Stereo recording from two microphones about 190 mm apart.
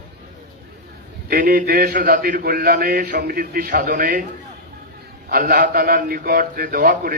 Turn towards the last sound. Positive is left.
turn(degrees=-50)  # may be behind; listen again after turning